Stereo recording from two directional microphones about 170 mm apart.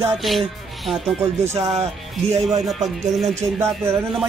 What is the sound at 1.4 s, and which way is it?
Speech, 15° right (ahead or behind).